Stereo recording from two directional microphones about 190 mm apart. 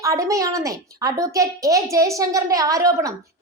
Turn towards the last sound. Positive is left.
turn(degrees=-15)  # may be behind; listen again after turning